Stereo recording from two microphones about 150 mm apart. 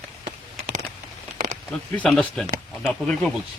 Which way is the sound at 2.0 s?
5° left (ahead or behind).